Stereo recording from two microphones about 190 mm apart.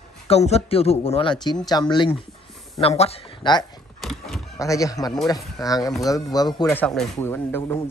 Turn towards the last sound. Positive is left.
turn(degrees=10)  # may be behind; listen again after turning